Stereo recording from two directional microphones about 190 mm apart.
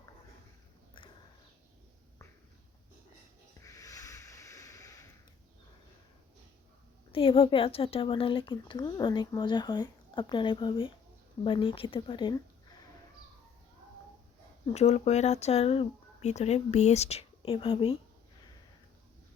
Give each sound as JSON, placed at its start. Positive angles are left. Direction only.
{"t": 3.6, "sound": "snort", "side_deg": 20}
{"t": 7.1, "sound": "speech", "side_deg": 30}
{"t": 14.7, "sound": "speech", "side_deg": 35}